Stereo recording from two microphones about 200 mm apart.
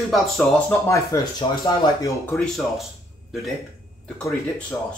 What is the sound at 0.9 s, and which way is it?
Speech, 15° left (ahead or behind).